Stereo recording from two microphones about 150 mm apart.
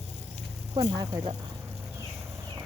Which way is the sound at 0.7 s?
30° right (ahead or behind).